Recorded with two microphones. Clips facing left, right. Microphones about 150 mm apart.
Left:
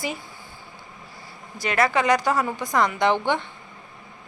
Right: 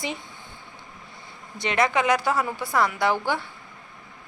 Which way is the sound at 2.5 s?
15° left (ahead or behind).